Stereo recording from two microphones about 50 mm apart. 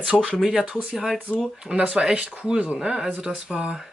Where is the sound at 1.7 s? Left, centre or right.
Centre.